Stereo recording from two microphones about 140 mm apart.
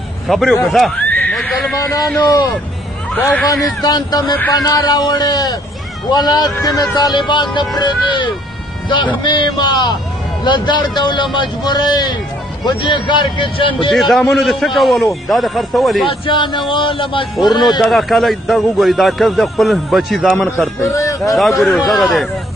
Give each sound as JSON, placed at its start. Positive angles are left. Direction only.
{"t": 0.3, "sound": "a man's voice", "side_deg": 0}
{"t": 1.0, "sound": "neigh", "side_deg": 10}
{"t": 3.2, "sound": "speech", "side_deg": 10}
{"t": 3.4, "sound": "a man's voice", "side_deg": 30}
{"t": 13.9, "sound": "a man's voice", "side_deg": 0}
{"t": 16.1, "sound": "speech", "side_deg": 35}
{"t": 17.4, "sound": "a man's voice", "side_deg": 0}
{"t": 20.8, "sound": "a man's voice", "side_deg": 20}
{"t": 21.4, "sound": "a man's voice", "side_deg": 0}